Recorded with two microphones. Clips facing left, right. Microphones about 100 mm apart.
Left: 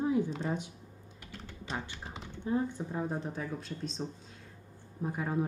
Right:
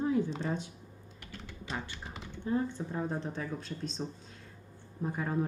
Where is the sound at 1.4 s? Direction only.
30° left (ahead or behind).